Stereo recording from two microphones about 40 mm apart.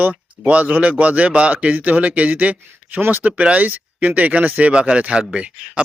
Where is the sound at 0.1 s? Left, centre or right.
Right.